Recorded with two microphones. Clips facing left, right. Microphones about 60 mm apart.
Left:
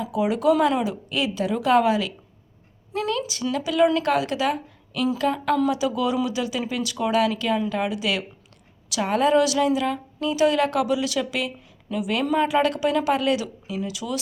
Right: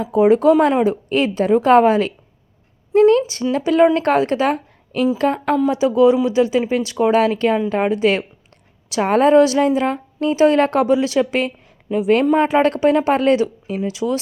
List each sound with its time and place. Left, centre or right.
0.0 s a woman's voice: right
1.4 s a woman's voice: right